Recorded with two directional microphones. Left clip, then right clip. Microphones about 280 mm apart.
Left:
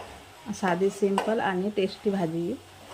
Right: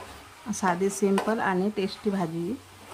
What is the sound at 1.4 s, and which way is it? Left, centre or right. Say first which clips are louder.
Speech: even; centre.